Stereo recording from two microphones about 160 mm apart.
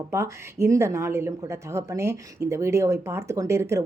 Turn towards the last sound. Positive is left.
turn(degrees=-15)  # may be behind; listen again after turning